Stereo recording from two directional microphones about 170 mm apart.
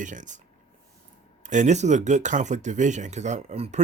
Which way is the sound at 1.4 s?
45° right (ahead or behind).